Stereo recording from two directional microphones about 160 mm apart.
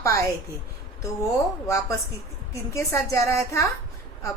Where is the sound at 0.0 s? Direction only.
20° left (ahead or behind).